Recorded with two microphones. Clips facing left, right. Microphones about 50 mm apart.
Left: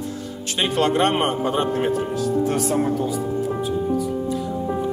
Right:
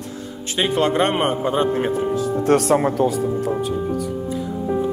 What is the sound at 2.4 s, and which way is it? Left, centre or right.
Speech, right.